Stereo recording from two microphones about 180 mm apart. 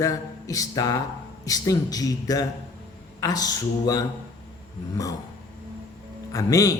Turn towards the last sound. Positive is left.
turn(degrees=20)  # may be behind; listen again after turning